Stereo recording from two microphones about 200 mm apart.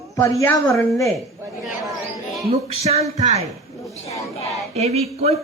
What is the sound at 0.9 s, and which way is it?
Speech, centre (ahead or behind).